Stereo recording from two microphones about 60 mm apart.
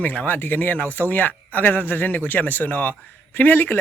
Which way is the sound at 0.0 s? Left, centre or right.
Left.